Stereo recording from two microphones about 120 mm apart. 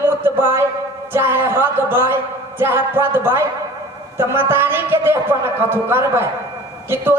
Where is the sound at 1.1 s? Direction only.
20° right (ahead or behind).